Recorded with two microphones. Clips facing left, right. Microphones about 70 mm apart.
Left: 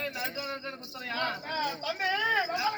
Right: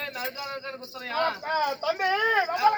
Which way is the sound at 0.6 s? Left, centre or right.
Right.